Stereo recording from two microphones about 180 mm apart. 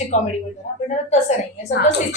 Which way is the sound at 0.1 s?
40° left (ahead or behind).